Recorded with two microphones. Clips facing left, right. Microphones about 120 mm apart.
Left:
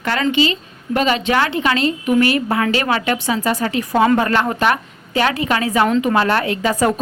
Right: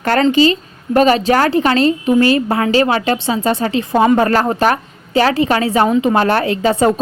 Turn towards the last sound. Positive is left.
turn(degrees=-30)  # may be behind; listen again after turning